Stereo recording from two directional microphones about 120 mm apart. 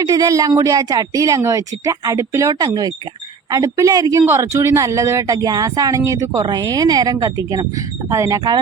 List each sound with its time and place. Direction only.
0.0 s speech: 30° right (ahead or behind)